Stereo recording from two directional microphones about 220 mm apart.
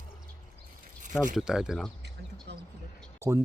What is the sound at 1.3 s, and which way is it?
Speech, centre (ahead or behind).